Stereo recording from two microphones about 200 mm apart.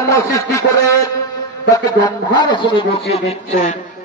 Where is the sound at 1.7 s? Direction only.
20° left (ahead or behind).